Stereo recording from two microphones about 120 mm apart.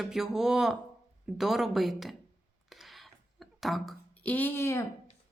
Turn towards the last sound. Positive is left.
turn(degrees=20)  # may be behind; listen again after turning